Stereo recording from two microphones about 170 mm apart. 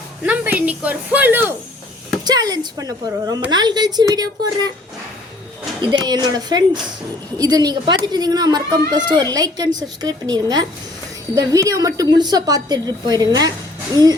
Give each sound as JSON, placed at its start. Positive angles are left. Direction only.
{"t": 0.3, "sound": "a woman's voice", "side_deg": -10}
{"t": 2.2, "sound": "a woman's voice", "side_deg": -25}
{"t": 5.8, "sound": "a woman's voice", "side_deg": -25}